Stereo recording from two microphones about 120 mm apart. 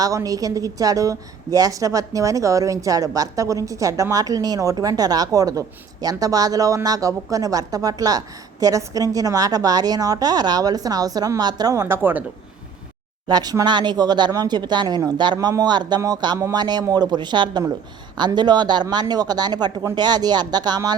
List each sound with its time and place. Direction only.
0.0 s a woman's voice: 30° right (ahead or behind)
13.2 s a woman's voice: 35° right (ahead or behind)